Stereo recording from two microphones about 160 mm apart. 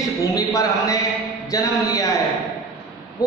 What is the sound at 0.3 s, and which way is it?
Speech, 20° left (ahead or behind).